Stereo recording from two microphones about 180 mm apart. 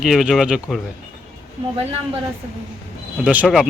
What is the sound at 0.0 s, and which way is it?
Speech, centre (ahead or behind).